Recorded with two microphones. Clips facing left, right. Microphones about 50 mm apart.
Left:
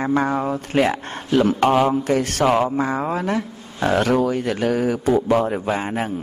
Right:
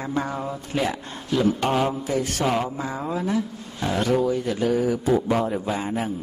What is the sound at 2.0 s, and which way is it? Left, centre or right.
A man's voice, left.